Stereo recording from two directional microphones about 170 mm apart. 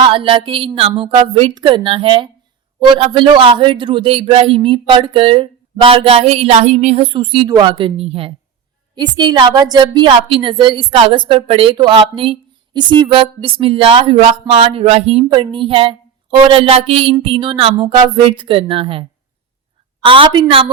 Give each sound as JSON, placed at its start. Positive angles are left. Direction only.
{"t": 0.0, "sound": "a woman's voice", "side_deg": -30}
{"t": 20.1, "sound": "a woman's voice", "side_deg": -30}